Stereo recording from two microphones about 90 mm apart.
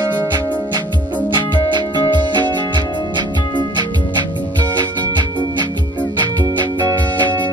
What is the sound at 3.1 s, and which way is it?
Music, 55° right (ahead or behind).